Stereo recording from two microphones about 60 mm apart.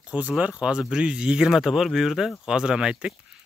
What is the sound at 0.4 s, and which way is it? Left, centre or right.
Speech, centre.